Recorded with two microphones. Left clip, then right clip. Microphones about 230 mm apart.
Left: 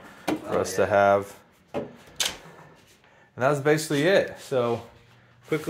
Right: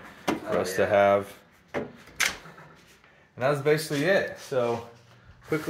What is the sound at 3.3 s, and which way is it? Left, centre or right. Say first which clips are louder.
Speech: left 2 dB; left.